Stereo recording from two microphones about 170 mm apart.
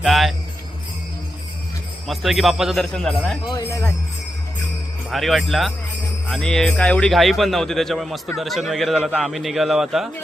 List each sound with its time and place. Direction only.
0.0 s jingle bell: centre (ahead or behind)
2.0 s speech: centre (ahead or behind)
3.4 s speech: 20° left (ahead or behind)
5.1 s speech: centre (ahead or behind)